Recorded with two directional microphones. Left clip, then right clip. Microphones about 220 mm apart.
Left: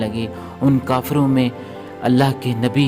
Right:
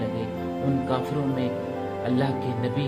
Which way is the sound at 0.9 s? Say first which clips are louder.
Left 8 dB; 45° left (ahead or behind).